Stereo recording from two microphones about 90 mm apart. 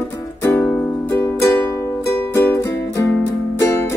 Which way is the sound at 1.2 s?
30° left (ahead or behind).